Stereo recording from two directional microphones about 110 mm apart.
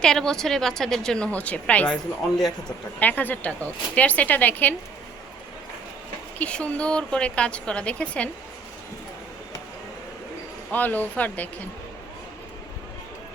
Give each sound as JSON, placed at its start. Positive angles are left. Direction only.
{"t": 0.0, "sound": "a woman's voice", "side_deg": 5}
{"t": 3.0, "sound": "speech", "side_deg": 15}
{"t": 6.4, "sound": "speech", "side_deg": 10}
{"t": 10.7, "sound": "speech", "side_deg": 15}